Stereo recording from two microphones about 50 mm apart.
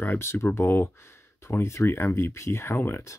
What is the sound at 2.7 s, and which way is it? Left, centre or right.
Speech, left.